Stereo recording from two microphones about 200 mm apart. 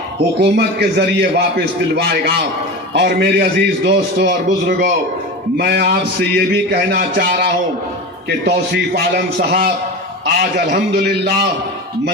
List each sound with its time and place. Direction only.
0.3 s a man's voice: 55° right (ahead or behind)
10.8 s a man's voice: 55° right (ahead or behind)